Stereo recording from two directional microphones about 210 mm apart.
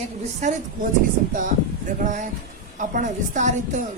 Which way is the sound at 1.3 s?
40° right (ahead or behind).